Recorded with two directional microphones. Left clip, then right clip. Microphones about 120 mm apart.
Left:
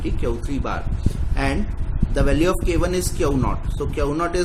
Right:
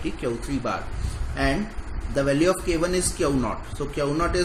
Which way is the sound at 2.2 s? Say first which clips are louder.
Left 1 dB; 35° left (ahead or behind).